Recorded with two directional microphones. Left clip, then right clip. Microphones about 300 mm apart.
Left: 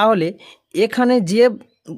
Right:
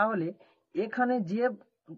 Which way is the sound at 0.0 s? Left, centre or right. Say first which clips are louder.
Left 13 dB; left.